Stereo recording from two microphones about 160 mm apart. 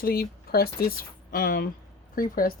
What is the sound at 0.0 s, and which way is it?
Speech, 70° left (ahead or behind).